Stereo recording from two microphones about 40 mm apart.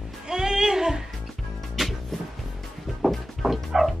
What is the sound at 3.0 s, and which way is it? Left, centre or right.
Music, centre.